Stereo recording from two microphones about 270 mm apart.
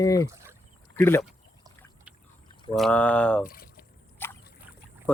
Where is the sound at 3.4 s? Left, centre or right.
Left.